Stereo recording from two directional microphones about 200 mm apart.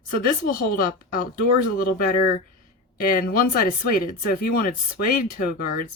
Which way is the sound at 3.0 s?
45° left (ahead or behind).